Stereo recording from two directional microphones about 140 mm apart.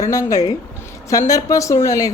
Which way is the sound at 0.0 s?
25° left (ahead or behind).